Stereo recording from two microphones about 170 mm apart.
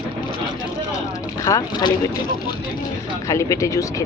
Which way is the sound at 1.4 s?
20° left (ahead or behind).